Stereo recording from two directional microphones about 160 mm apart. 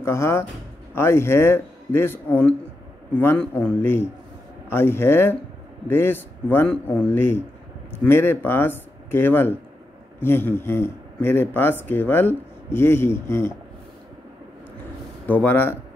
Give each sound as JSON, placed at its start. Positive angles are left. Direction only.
{"t": 0.0, "sound": "speech", "side_deg": 15}
{"t": 15.2, "sound": "speech", "side_deg": 10}